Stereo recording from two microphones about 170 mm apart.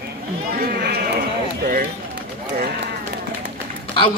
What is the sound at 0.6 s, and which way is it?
Run, 70° right (ahead or behind).